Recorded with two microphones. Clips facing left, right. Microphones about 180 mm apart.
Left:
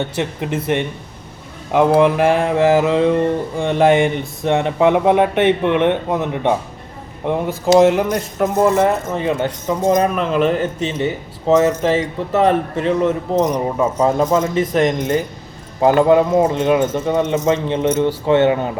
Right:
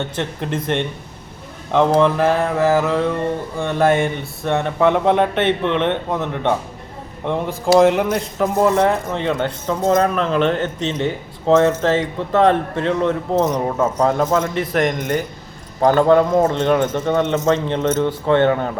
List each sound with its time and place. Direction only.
0.0 s speech: 10° left (ahead or behind)
2.0 s speech: 10° left (ahead or behind)